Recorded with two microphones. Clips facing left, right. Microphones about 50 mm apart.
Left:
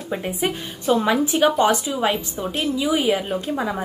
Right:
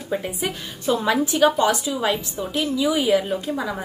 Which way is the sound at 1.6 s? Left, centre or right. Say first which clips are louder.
Left 2 dB; left.